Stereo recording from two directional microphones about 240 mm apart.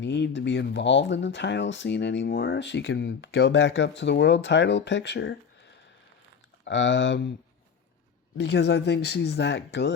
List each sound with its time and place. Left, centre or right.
0.0 s speech: left
8.4 s speech: left